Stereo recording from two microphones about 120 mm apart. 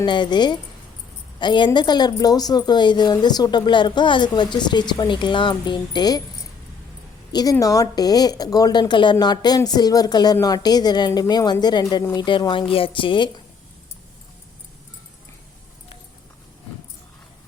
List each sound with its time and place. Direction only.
0.0 s speech: 40° left (ahead or behind)
7.6 s speech: 30° left (ahead or behind)